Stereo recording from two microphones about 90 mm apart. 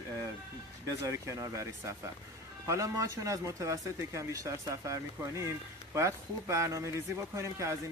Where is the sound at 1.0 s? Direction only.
35° right (ahead or behind).